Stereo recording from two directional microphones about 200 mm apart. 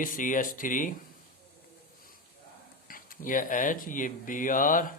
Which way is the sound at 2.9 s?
45° left (ahead or behind).